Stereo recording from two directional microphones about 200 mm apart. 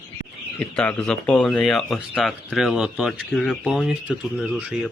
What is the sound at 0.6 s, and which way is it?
Speech, 5° left (ahead or behind).